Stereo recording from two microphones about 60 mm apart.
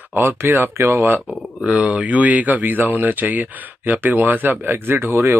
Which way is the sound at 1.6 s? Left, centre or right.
Right.